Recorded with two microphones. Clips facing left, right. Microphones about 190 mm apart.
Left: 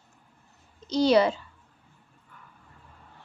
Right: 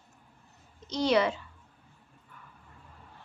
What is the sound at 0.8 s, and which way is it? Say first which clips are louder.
Speech: left 5 dB; 35° left (ahead or behind).